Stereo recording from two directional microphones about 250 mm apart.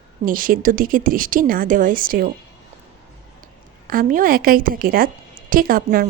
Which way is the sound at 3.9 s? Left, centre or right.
Right.